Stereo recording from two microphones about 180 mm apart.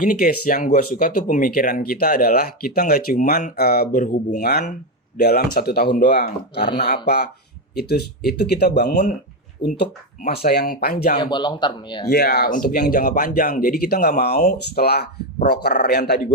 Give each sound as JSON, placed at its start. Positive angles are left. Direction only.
{"t": 0.0, "sound": "speech", "side_deg": 50}
{"t": 6.6, "sound": "speech", "side_deg": 70}
{"t": 11.2, "sound": "speech", "side_deg": 25}
{"t": 12.1, "sound": "speech", "side_deg": 60}